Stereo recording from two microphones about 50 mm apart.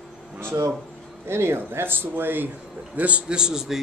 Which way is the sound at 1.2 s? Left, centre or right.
Right.